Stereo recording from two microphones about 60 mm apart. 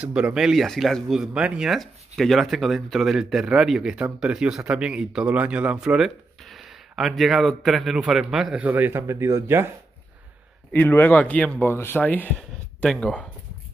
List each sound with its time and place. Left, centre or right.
0.0 s speech: centre
0.4 s speech: centre
1.3 s speech: centre
1.7 s a man's voice: centre
8.5 s speech: right
8.9 s speech: right
10.7 s a man's voice: left
11.1 s speech: left
11.6 s a man's voice: left
12.4 s speech: centre